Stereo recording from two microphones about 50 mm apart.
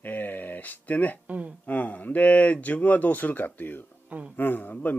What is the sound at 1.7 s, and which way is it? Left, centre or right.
Speech, left.